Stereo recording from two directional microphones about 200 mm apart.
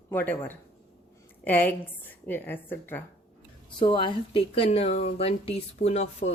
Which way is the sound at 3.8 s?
25° left (ahead or behind).